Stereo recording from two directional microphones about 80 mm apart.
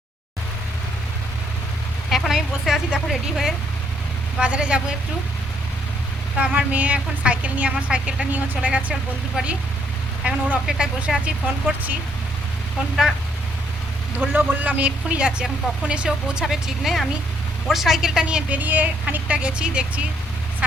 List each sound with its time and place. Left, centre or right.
2.0 s a woman's voice: centre
6.3 s a woman's voice: centre
11.6 s speech: right
14.2 s a woman's voice: right